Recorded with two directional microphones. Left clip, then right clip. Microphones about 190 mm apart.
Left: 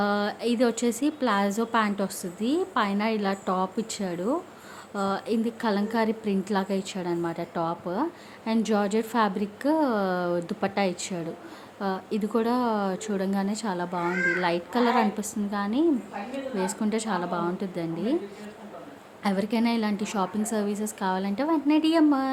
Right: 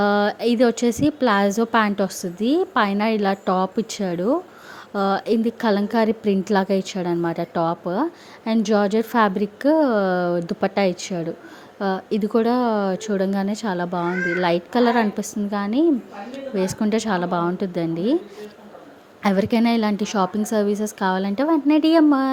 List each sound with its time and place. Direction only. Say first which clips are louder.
0.0 s a woman's voice: right 7 dB; 30° right (ahead or behind)
19.2 s a woman's voice: right 7 dB; 35° right (ahead or behind)